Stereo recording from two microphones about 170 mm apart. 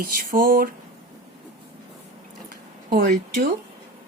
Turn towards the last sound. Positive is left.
turn(degrees=-60)  # may be behind; listen again after turning